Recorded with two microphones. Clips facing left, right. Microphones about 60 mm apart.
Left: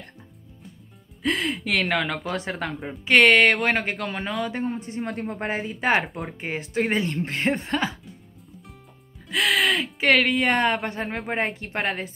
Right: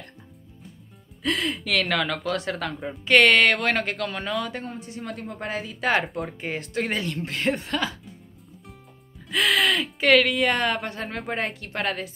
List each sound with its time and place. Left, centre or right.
1.2 s speech: centre
4.2 s speech: centre
4.5 s speech: centre
4.7 s a woman's voice: left
6.0 s speech: centre
6.4 s speech: centre
9.3 s speech: centre; by 10.8 s left
11.0 s speech: centre
11.2 s speech: left